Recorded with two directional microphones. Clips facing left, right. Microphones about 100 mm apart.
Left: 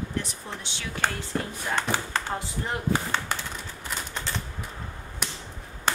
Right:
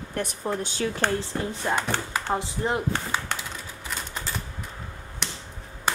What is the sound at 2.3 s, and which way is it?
Speech, 25° right (ahead or behind).